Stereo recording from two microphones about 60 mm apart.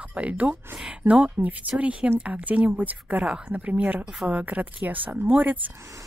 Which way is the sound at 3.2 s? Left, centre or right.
Centre.